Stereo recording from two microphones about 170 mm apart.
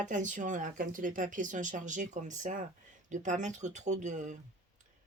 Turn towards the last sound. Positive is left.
turn(degrees=-45)  # may be behind; listen again after turning